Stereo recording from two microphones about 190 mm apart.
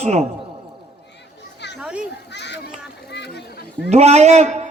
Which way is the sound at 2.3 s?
65° left (ahead or behind).